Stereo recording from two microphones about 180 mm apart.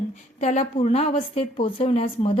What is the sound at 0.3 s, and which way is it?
A woman's voice, 40° left (ahead or behind).